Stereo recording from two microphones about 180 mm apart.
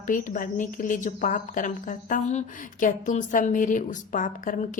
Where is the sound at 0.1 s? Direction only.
45° left (ahead or behind).